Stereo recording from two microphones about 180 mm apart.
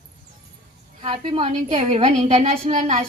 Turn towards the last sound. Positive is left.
turn(degrees=-40)  # may be behind; listen again after turning